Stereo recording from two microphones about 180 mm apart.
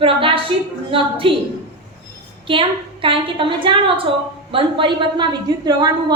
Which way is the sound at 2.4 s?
30° right (ahead or behind).